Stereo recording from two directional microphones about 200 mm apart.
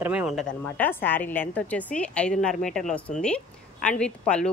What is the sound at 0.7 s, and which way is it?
A woman's voice, 10° left (ahead or behind).